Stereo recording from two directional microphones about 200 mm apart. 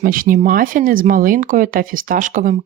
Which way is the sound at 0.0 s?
45° right (ahead or behind).